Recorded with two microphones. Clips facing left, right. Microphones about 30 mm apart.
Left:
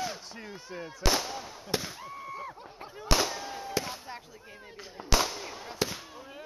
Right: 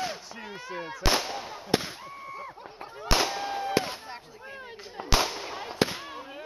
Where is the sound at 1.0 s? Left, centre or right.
Right.